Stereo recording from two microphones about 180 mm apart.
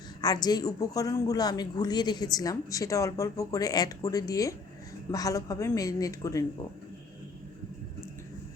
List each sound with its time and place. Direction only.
0.2 s speech: 20° left (ahead or behind)